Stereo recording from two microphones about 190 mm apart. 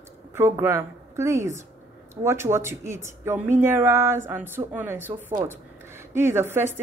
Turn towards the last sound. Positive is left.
turn(degrees=-10)  # may be behind; listen again after turning